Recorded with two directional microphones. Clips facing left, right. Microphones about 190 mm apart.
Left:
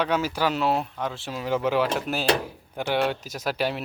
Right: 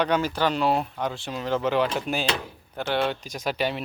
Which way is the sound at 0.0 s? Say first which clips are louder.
Right 1 dB; 5° left (ahead or behind).